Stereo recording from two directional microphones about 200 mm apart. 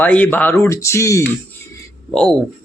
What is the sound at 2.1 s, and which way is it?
Speech, 5° left (ahead or behind).